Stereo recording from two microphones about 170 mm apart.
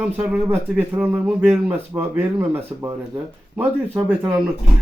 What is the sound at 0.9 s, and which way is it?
Speech, 10° right (ahead or behind).